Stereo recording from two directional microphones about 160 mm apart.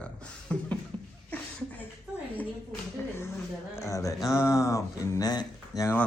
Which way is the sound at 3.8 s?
20° left (ahead or behind).